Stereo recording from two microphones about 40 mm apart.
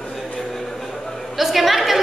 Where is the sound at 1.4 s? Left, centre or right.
Centre.